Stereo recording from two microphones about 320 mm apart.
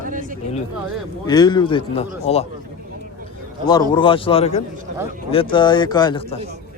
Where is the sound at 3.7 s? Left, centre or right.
Centre.